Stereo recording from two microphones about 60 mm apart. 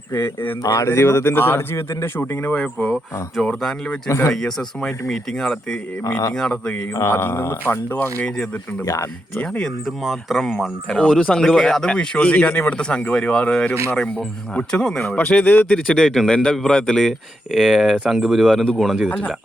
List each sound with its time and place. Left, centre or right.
0.1 s speech: left
0.6 s speech: left
0.9 s speech: left
2.1 s speech: left
3.4 s speech: centre
6.1 s speech: left
6.3 s speech: centre
7.1 s speech: left
9.4 s speech: centre
9.8 s speech: centre
10.9 s speech: centre
15.9 s speech: centre